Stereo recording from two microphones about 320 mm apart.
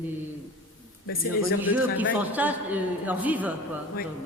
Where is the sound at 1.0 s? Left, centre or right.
Left.